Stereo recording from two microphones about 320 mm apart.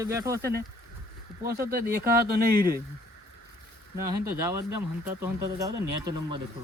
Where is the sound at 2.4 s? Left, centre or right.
Right.